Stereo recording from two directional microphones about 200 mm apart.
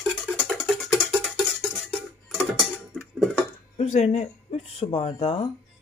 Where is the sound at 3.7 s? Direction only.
35° left (ahead or behind).